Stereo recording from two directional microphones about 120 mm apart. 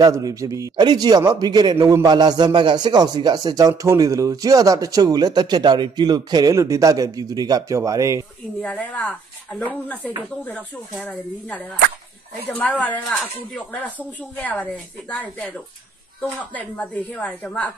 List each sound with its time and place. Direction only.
0.0 s a man's voice: 30° right (ahead or behind)
8.5 s speech: 10° left (ahead or behind)